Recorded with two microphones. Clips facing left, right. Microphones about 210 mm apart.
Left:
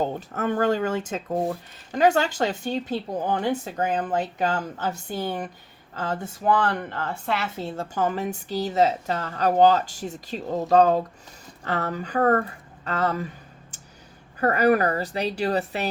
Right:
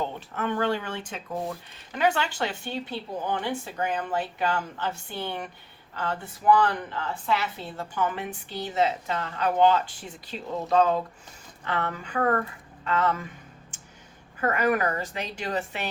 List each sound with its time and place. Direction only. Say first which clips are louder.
0.0 s a woman's voice: left 4 dB; 45° left (ahead or behind)